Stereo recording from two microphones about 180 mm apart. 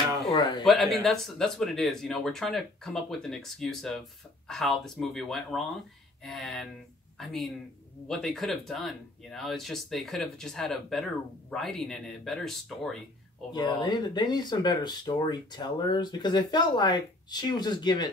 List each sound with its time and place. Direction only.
0.3 s speech: 25° left (ahead or behind)
0.7 s speech: centre (ahead or behind)
13.5 s speech: 25° left (ahead or behind)